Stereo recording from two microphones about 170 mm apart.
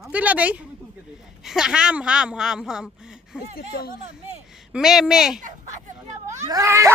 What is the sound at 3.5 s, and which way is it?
Speech, 65° left (ahead or behind).